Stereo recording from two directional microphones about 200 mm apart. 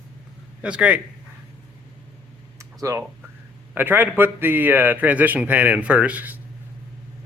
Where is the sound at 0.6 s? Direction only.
5° right (ahead or behind).